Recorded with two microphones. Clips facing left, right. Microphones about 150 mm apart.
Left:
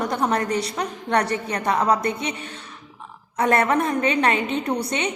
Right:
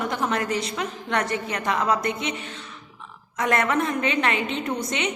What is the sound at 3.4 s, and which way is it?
A woman's voice, 35° left (ahead or behind).